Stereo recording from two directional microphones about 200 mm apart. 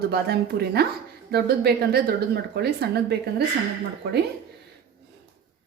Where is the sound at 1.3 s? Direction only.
50° right (ahead or behind).